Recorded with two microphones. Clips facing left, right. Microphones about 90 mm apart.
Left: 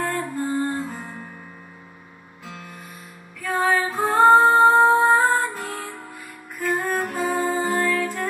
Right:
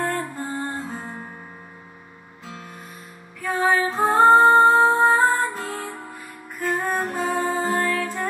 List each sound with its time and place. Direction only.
0.0 s music: centre (ahead or behind)
3.4 s music: 5° right (ahead or behind)
7.0 s music: 35° right (ahead or behind)
7.4 s music: centre (ahead or behind)